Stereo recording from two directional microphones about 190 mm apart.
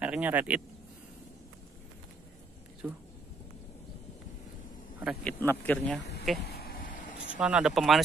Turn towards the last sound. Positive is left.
turn(degrees=0)  # may be behind; listen again after turning